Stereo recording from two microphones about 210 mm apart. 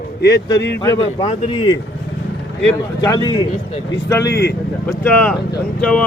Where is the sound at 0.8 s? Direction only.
20° left (ahead or behind).